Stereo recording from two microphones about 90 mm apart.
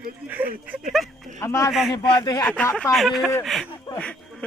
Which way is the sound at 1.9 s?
45° left (ahead or behind).